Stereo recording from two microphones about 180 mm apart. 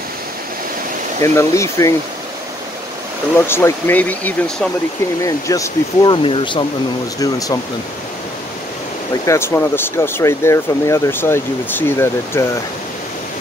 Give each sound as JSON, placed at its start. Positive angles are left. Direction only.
{"t": 1.2, "sound": "speech", "side_deg": 15}
{"t": 3.3, "sound": "speech", "side_deg": 15}
{"t": 9.2, "sound": "speech", "side_deg": 15}